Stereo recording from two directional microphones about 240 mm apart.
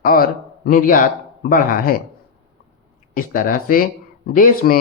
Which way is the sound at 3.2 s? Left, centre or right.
Left.